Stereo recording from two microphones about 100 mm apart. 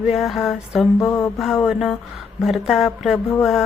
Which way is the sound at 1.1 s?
25° left (ahead or behind).